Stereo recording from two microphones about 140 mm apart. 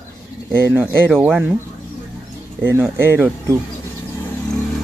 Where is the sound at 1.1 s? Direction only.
5° right (ahead or behind).